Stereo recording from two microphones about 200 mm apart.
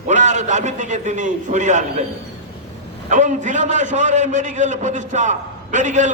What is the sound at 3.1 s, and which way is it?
A man's voice, 40° right (ahead or behind).